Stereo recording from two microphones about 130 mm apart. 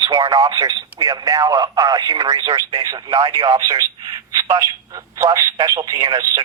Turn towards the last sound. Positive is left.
turn(degrees=-25)  # may be behind; listen again after turning